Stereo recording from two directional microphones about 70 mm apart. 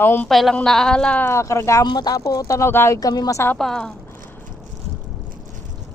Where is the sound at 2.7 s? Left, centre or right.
Left.